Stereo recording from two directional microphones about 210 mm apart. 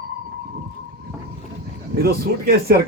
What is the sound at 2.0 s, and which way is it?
Speech, 45° right (ahead or behind).